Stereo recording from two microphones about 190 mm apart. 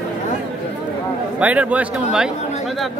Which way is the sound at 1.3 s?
5° right (ahead or behind).